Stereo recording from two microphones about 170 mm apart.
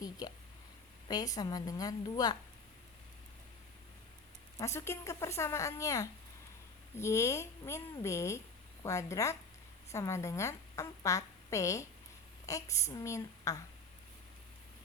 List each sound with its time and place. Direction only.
0.0 s a woman's voice: 25° left (ahead or behind)
4.5 s a woman's voice: 15° left (ahead or behind)